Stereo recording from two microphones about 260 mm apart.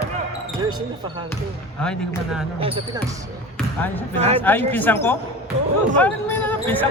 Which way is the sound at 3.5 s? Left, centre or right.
Centre.